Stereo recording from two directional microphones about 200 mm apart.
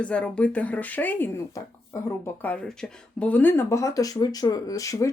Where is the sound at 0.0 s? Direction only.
5° left (ahead or behind).